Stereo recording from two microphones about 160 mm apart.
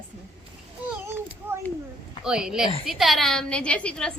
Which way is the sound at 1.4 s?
15° right (ahead or behind).